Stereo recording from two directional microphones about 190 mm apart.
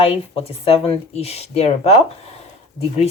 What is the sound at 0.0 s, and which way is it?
Speech, 30° left (ahead or behind).